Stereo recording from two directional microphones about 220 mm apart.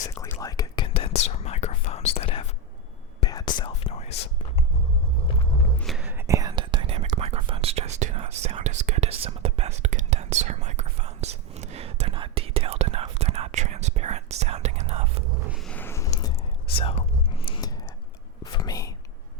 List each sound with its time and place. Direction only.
0.2 s whispering: 15° left (ahead or behind)
5.8 s whispering: 5° right (ahead or behind); by 15.0 s 30° right (ahead or behind)
15.4 s a sound: centre (ahead or behind)
16.7 s whispering: 25° left (ahead or behind)